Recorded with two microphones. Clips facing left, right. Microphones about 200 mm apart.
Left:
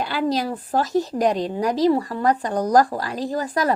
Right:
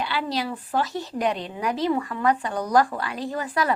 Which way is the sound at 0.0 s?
45° left (ahead or behind).